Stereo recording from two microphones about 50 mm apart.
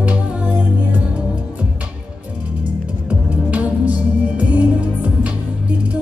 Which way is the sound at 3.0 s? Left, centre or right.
Right.